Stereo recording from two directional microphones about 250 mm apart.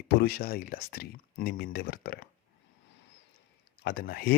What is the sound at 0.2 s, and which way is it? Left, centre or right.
Speech, left.